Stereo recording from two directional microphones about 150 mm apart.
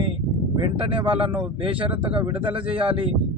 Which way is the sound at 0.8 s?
35° right (ahead or behind).